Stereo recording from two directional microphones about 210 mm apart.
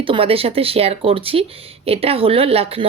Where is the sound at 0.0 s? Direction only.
25° right (ahead or behind).